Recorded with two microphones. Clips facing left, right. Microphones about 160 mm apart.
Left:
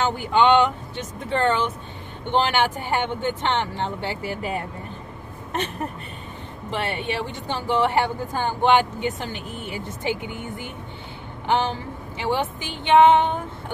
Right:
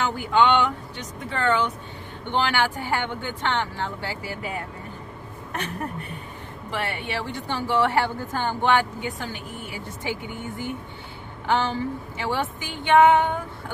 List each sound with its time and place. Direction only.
0.0 s a woman's voice: 20° left (ahead or behind)
6.7 s a woman's voice: 20° left (ahead or behind)
11.4 s a woman's voice: 20° left (ahead or behind)